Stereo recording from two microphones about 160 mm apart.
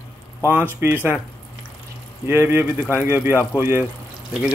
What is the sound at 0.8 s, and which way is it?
Speech, 10° right (ahead or behind).